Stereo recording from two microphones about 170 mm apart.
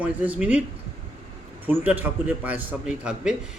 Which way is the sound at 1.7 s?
10° right (ahead or behind).